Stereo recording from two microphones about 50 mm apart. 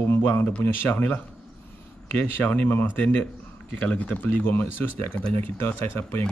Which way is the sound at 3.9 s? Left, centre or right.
Left.